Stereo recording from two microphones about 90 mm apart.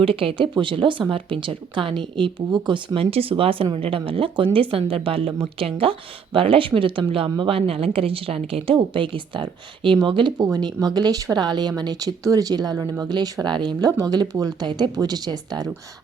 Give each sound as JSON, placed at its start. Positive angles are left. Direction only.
{"t": 0.0, "sound": "a woman's voice", "side_deg": -90}
{"t": 7.1, "sound": "a woman's voice", "side_deg": -85}
{"t": 13.9, "sound": "speech", "side_deg": -45}